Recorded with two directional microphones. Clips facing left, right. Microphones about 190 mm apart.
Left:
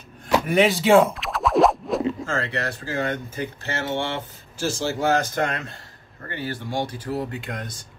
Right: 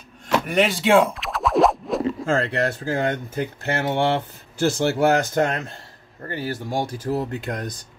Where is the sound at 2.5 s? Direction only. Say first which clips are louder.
Right 5 dB; 50° right (ahead or behind).